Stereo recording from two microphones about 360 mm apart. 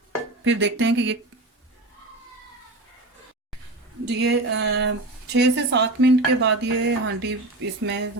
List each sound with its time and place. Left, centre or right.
0.4 s a woman's voice: right
4.0 s a woman's voice: right